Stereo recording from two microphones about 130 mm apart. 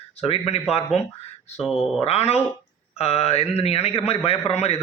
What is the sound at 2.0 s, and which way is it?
A man's voice, 50° left (ahead or behind).